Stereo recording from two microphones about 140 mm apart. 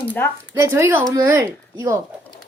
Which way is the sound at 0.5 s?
20° right (ahead or behind).